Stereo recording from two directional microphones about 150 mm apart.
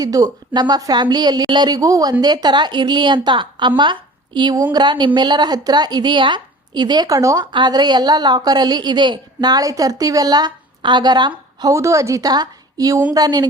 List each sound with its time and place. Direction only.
0.0 s a woman's voice: 25° right (ahead or behind)